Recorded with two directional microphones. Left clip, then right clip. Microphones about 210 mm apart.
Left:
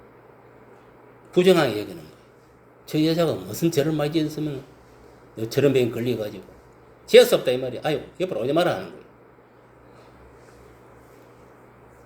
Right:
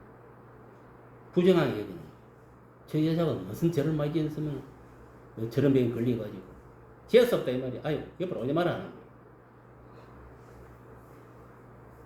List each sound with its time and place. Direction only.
1.3 s a man's voice: 20° left (ahead or behind)
2.8 s a man's voice: 20° left (ahead or behind)
5.4 s a man's voice: 20° left (ahead or behind)